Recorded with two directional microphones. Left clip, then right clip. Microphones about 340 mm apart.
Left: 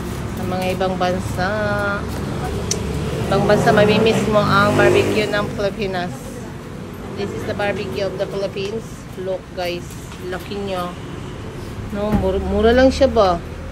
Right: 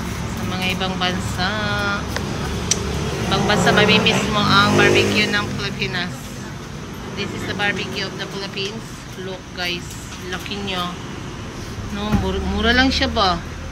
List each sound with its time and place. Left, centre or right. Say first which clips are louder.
0.5 s speech: left 3 dB; centre
3.3 s speech: left 3 dB; centre
7.2 s speech: left 1 dB; centre
10.5 s speech: left 1 dB; centre
12.0 s speech: left 4 dB; centre